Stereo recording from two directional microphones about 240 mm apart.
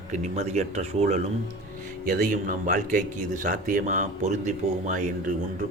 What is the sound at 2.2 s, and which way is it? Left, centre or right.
Speech, right.